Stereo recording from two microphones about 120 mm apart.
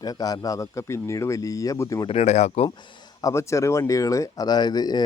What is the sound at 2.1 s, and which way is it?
Speech, 65° left (ahead or behind).